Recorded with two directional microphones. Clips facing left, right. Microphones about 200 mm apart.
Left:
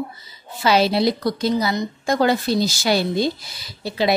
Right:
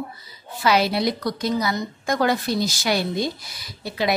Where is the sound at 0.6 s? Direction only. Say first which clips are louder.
Left 3 dB; 30° left (ahead or behind).